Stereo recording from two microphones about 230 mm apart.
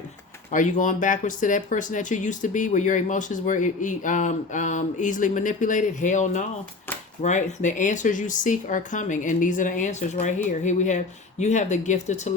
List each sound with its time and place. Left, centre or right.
0.5 s speech: left